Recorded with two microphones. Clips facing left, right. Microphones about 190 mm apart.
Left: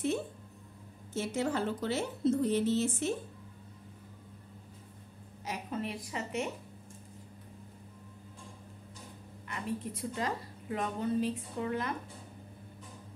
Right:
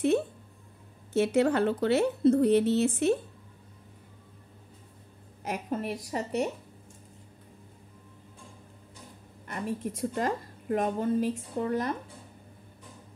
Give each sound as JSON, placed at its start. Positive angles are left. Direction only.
{"t": 1.1, "sound": "a woman's voice", "side_deg": -65}
{"t": 5.4, "sound": "a woman's voice", "side_deg": -50}
{"t": 9.5, "sound": "a woman's voice", "side_deg": -45}